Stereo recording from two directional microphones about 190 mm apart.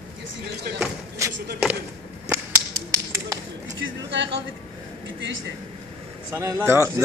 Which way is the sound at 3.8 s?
70° right (ahead or behind).